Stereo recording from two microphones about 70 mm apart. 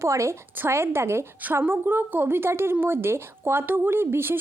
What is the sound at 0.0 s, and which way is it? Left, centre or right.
A woman's voice, right.